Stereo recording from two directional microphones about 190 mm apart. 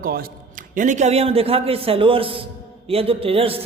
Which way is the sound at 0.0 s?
50° right (ahead or behind).